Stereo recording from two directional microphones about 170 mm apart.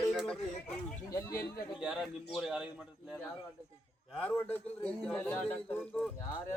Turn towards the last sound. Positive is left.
turn(degrees=10)  # may be behind; listen again after turning